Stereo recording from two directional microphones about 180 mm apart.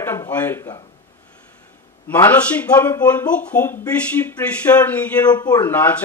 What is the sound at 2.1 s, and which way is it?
A man's voice, 10° left (ahead or behind).